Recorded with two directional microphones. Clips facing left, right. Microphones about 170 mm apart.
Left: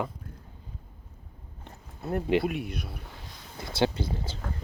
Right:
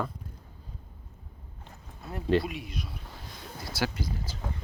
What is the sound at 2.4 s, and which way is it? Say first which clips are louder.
Speech: left 6 dB; 55° left (ahead or behind).